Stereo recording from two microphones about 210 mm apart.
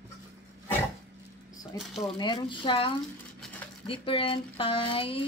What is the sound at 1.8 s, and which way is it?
Speech, centre (ahead or behind).